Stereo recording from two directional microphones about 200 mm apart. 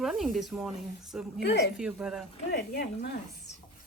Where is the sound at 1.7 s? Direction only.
5° right (ahead or behind).